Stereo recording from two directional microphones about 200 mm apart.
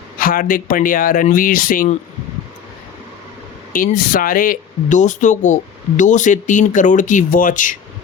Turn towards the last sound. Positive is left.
turn(degrees=40)  # may be behind; listen again after turning